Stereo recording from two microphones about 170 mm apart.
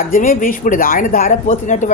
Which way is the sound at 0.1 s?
50° left (ahead or behind).